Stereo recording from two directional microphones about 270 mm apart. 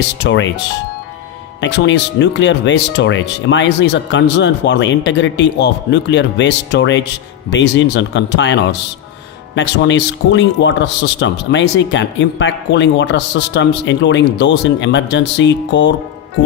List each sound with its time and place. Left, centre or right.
0.2 s speech: left
1.6 s speech: left